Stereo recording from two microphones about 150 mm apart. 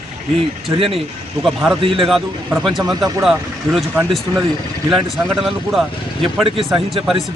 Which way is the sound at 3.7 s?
Centre (ahead or behind).